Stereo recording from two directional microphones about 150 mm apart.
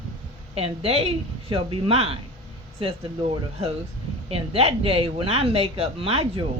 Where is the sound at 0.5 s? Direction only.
40° right (ahead or behind).